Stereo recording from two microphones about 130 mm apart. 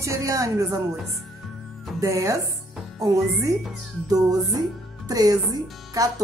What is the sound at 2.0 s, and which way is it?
Speech, 25° right (ahead or behind).